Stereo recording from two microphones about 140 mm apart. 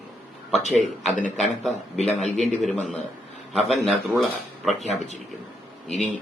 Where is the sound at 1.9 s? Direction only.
50° left (ahead or behind).